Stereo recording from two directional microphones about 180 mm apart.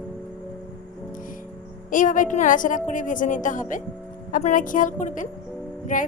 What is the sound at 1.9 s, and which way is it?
A woman's voice, 45° left (ahead or behind).